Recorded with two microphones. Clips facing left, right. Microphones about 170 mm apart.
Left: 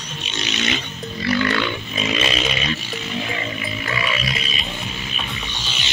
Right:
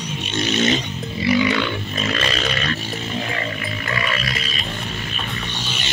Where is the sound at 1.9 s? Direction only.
15° left (ahead or behind).